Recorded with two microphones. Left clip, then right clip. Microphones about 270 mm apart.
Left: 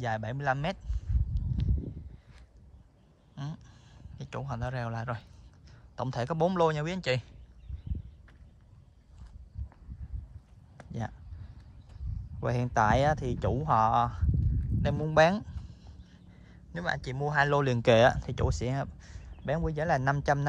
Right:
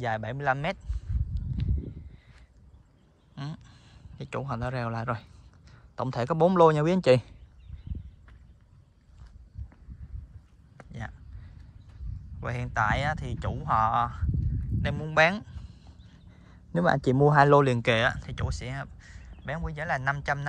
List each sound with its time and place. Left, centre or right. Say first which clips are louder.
0.0 s speech: right 3 dB; centre
3.3 s speech: right 3 dB; centre
10.9 s a sound: left 2 dB; centre
12.4 s speech: left 1 dB; centre
14.8 s a sound: right 1 dB; centre
16.8 s speech: right 10 dB; centre; by 20.4 s left